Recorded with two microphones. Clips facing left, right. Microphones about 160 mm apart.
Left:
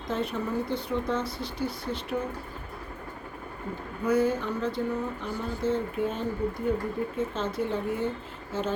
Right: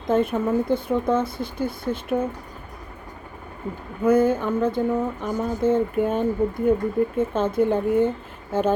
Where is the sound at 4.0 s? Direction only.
50° right (ahead or behind).